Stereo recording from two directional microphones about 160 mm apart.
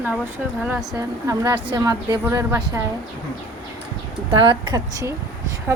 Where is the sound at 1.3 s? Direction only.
25° right (ahead or behind).